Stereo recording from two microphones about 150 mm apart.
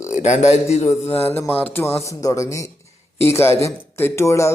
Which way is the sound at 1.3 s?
15° left (ahead or behind).